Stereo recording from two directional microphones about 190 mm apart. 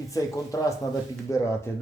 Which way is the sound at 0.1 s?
15° left (ahead or behind).